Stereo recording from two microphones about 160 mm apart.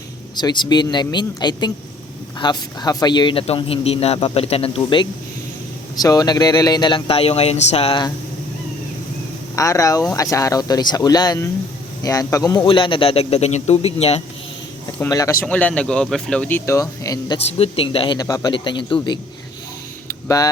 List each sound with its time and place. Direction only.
0.3 s a man's voice: 30° left (ahead or behind)
6.0 s speech: 25° left (ahead or behind)
9.6 s a man's voice: 20° left (ahead or behind); by 14.2 s 40° left (ahead or behind)
15.1 s speech: 20° left (ahead or behind)
15.4 s speech: 10° left (ahead or behind)
17.4 s a man's voice: 35° left (ahead or behind)
20.2 s speech: 20° left (ahead or behind)